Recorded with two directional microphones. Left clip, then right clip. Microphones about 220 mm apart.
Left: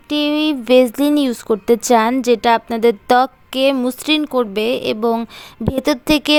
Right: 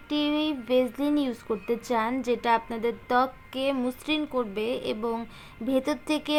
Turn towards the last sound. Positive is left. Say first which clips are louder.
# left 13 dB
turn(degrees=40)  # may be behind; listen again after turning